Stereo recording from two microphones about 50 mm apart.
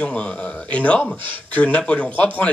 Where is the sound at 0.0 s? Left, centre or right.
Left.